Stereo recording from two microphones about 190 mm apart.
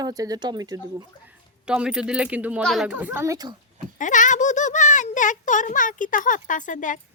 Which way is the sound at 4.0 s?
40° left (ahead or behind).